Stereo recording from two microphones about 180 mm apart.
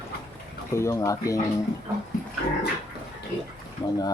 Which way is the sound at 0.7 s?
15° left (ahead or behind).